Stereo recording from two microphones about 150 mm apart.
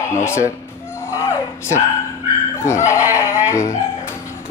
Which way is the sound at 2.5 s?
20° left (ahead or behind).